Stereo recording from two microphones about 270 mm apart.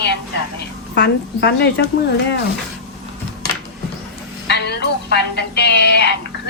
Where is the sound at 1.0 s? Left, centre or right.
Left.